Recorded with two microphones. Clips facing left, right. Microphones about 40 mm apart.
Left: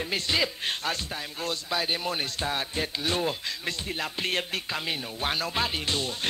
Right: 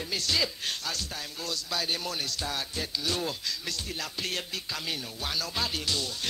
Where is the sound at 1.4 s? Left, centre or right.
Left.